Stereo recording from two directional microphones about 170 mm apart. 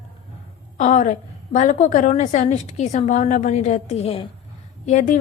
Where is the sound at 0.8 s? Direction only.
45° left (ahead or behind).